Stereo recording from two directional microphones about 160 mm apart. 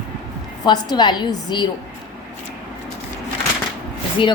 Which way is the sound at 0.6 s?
25° left (ahead or behind).